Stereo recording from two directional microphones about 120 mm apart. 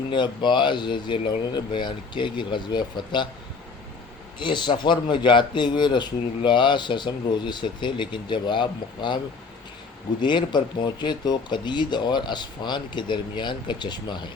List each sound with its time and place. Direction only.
0.1 s speech: 40° left (ahead or behind)
4.4 s speech: 40° left (ahead or behind)